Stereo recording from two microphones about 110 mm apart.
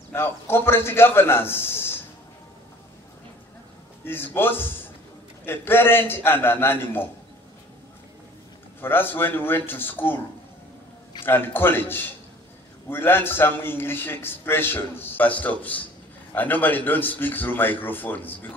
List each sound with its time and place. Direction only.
0.1 s a man's voice: 20° left (ahead or behind)
4.0 s a man's voice: 20° left (ahead or behind)
8.8 s a man's voice: 20° left (ahead or behind)
11.2 s a man's voice: 20° left (ahead or behind)